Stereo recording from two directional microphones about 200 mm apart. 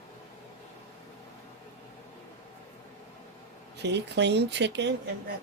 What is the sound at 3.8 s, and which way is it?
Speech, 60° right (ahead or behind).